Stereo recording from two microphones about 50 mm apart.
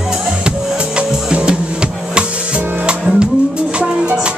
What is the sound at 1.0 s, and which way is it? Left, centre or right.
Music, right.